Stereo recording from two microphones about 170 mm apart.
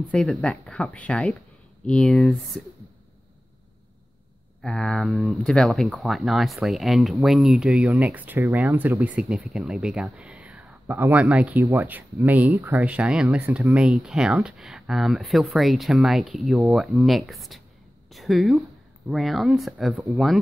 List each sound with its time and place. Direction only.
0.1 s speech: 5° left (ahead or behind)
4.6 s speech: 5° left (ahead or behind); by 12.8 s 15° right (ahead or behind)
12.8 s speech: 5° right (ahead or behind)